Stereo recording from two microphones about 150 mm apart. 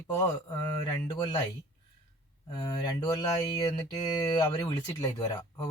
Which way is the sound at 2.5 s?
25° left (ahead or behind).